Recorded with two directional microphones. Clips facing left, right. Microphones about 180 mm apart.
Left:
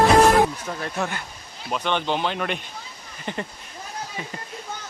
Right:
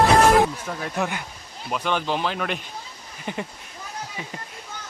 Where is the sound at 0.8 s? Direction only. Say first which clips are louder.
Right 2 dB; 10° right (ahead or behind).